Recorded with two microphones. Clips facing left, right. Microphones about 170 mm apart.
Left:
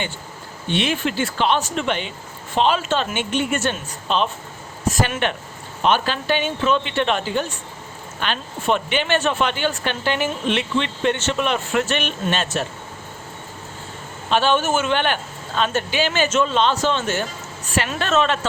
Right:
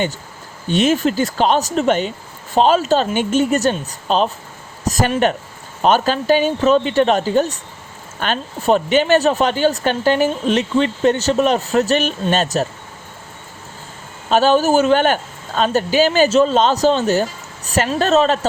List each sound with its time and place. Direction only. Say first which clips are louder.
0.7 s speech: right 6 dB; 40° right (ahead or behind)
14.3 s speech: right 5 dB; 40° right (ahead or behind)